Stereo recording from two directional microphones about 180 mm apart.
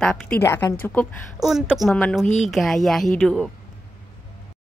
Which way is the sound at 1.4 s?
Centre (ahead or behind).